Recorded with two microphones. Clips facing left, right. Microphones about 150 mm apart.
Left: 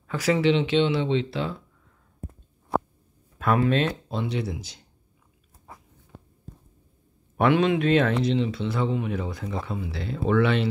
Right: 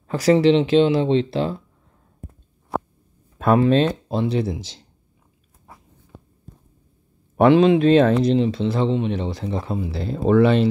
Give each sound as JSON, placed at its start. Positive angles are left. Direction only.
{"t": 0.1, "sound": "speech", "side_deg": -35}
{"t": 3.3, "sound": "speech", "side_deg": -30}
{"t": 7.3, "sound": "speech", "side_deg": -30}